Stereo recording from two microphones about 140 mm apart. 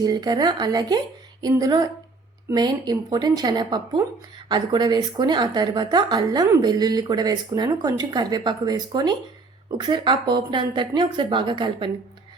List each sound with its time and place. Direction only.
0.0 s speech: 30° right (ahead or behind)